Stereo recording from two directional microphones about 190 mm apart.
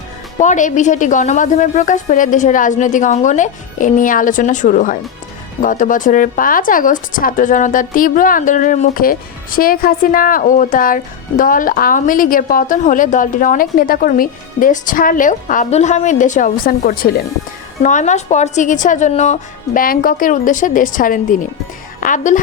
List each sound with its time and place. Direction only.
0.3 s a woman's voice: 40° left (ahead or behind)
17.8 s a woman's voice: 40° left (ahead or behind)